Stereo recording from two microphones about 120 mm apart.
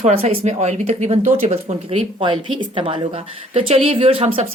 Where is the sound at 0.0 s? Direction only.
55° right (ahead or behind).